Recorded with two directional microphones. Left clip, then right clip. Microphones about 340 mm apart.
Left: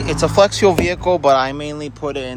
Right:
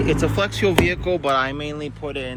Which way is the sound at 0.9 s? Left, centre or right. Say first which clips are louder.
Left 5 dB; left.